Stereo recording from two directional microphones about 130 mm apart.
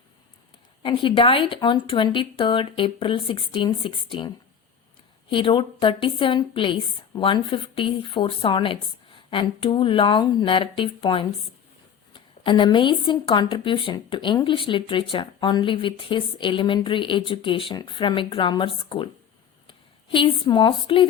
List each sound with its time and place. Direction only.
0.8 s speech: 40° left (ahead or behind)
5.3 s speech: 40° left (ahead or behind)